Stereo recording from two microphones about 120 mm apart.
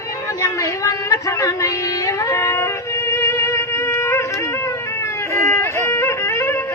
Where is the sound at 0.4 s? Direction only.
25° left (ahead or behind).